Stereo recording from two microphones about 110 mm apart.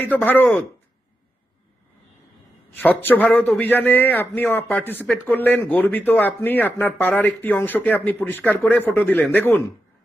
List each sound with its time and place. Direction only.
0.0 s speech: 15° left (ahead or behind)
2.7 s speech: 15° left (ahead or behind)